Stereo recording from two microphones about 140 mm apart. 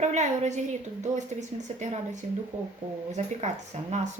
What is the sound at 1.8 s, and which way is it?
A woman's voice, 60° right (ahead or behind).